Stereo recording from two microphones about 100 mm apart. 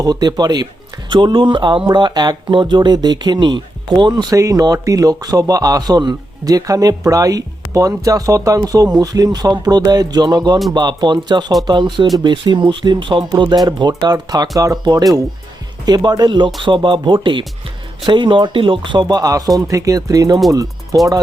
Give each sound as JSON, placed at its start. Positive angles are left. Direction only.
{"t": 0.0, "sound": "speech", "side_deg": -40}
{"t": 1.1, "sound": "speech", "side_deg": -55}
{"t": 4.4, "sound": "speech", "side_deg": -35}